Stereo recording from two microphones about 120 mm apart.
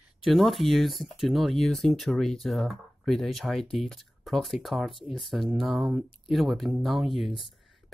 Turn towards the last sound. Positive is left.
turn(degrees=0)  # may be behind; listen again after turning